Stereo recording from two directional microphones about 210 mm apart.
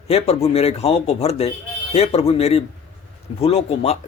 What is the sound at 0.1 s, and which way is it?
A man's voice, 30° left (ahead or behind).